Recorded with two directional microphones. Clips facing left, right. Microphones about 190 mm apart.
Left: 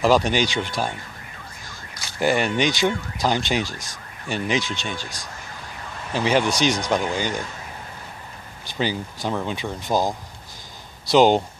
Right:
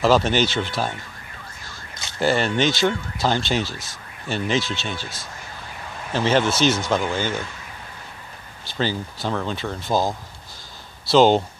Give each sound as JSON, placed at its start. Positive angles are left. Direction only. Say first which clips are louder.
{"t": 0.0, "sound": "speech", "louder": "right 1 dB", "side_deg": 15}
{"t": 2.1, "sound": "speech", "louder": "even", "side_deg": 15}
{"t": 8.6, "sound": "speech", "louder": "even", "side_deg": 15}